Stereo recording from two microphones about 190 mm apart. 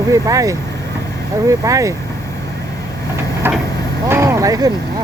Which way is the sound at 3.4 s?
10° right (ahead or behind).